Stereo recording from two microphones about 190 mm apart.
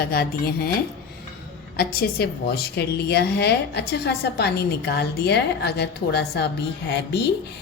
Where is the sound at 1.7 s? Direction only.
55° left (ahead or behind).